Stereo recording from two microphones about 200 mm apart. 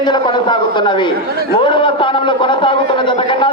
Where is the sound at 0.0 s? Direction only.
20° left (ahead or behind).